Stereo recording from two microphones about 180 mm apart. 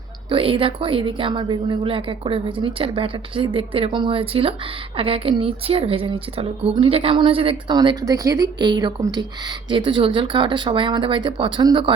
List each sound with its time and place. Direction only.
0.3 s a woman's voice: 30° right (ahead or behind)